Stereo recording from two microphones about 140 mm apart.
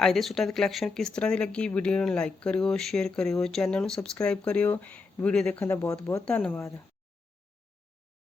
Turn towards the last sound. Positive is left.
turn(degrees=10)  # may be behind; listen again after turning